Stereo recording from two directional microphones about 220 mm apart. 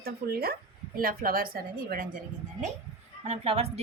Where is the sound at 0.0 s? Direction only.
45° right (ahead or behind).